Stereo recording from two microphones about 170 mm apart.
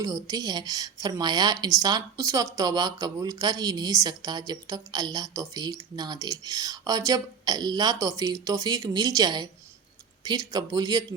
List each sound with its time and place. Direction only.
0.0 s a woman's voice: 20° right (ahead or behind)